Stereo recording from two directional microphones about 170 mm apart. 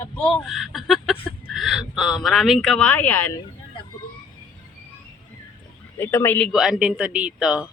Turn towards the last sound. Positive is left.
turn(degrees=-5)  # may be behind; listen again after turning